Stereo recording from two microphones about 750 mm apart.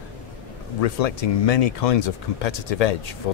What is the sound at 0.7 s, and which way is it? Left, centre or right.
Speech, left.